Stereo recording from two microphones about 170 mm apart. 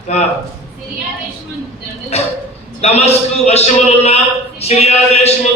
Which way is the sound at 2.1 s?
40° left (ahead or behind).